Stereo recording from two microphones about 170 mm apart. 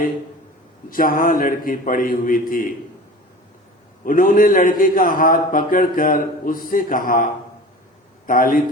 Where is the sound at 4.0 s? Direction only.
55° left (ahead or behind).